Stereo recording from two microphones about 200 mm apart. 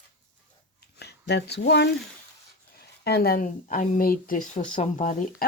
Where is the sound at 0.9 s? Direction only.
55° left (ahead or behind).